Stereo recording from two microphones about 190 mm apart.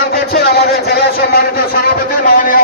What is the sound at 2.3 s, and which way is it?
Speech, 50° left (ahead or behind).